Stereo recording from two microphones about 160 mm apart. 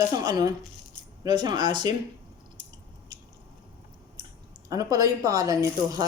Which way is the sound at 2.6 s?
25° right (ahead or behind).